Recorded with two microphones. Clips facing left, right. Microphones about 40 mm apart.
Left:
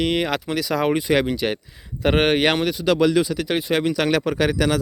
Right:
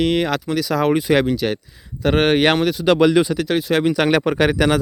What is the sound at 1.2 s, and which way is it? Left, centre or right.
Speech, centre.